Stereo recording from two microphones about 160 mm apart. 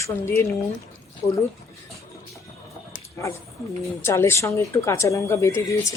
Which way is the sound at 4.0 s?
15° left (ahead or behind).